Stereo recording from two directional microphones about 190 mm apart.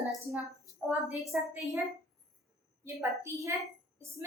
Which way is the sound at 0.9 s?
5° right (ahead or behind).